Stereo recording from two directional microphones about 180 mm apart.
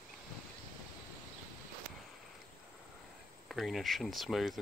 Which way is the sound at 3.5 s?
Centre (ahead or behind).